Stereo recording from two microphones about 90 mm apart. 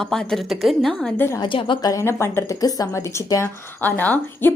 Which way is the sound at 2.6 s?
45° left (ahead or behind).